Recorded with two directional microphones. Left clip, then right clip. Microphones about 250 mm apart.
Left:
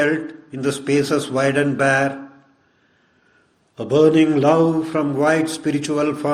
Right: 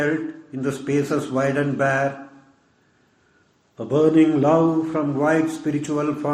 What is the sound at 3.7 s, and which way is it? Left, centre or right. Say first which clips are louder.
A man's voice: left 3 dB; left.